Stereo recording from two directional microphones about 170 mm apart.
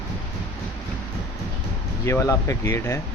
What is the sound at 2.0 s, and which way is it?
Speech, 20° left (ahead or behind).